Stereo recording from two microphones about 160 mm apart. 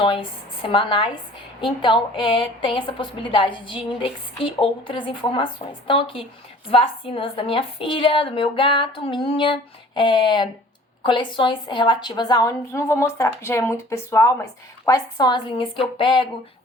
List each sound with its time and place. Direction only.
0.0 s a woman's voice: 35° left (ahead or behind)